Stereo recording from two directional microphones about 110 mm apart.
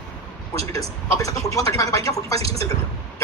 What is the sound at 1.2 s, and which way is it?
Speech, 30° left (ahead or behind).